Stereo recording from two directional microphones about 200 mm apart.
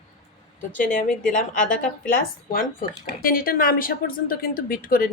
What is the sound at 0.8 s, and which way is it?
Speech, 40° left (ahead or behind).